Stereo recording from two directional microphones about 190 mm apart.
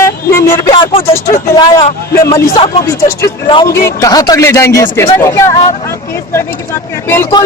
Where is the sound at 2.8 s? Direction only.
15° left (ahead or behind).